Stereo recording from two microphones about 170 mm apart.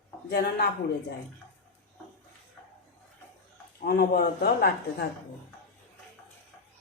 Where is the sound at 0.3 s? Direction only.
65° left (ahead or behind).